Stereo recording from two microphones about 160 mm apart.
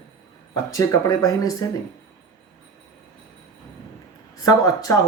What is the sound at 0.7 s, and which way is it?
Speech, 20° left (ahead or behind).